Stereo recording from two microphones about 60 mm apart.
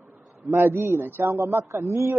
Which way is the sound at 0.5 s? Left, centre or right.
Right.